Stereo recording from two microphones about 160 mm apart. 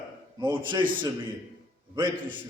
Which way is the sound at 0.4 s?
30° right (ahead or behind).